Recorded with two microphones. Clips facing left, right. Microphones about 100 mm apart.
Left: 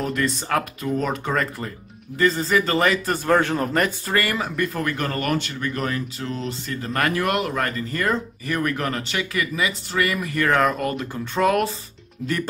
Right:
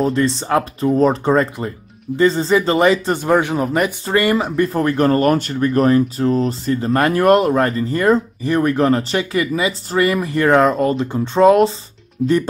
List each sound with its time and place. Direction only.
0.0 s speech: 30° right (ahead or behind); by 3.9 s 10° right (ahead or behind)
4.0 s speech: 20° right (ahead or behind)
12.2 s speech: centre (ahead or behind)